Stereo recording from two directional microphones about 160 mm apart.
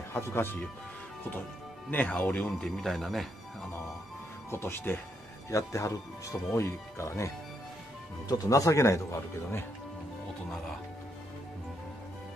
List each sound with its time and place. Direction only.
0.1 s speech: 15° left (ahead or behind)
1.9 s speech: 10° left (ahead or behind)
4.5 s speech: 15° left (ahead or behind)
8.3 s speech: 20° left (ahead or behind)